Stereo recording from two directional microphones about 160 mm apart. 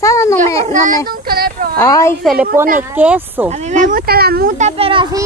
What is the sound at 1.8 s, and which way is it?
Speech, 20° left (ahead or behind).